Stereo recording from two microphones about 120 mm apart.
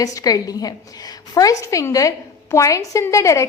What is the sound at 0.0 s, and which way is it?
A woman's voice, 30° left (ahead or behind).